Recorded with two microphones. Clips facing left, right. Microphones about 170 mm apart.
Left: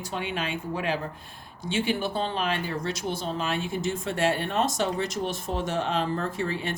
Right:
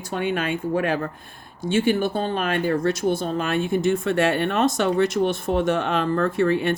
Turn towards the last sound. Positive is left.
turn(degrees=-60)  # may be behind; listen again after turning